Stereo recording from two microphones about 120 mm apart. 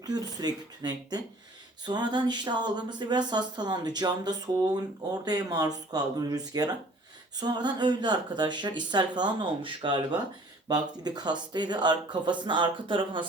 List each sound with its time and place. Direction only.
0.0 s speech: 35° right (ahead or behind)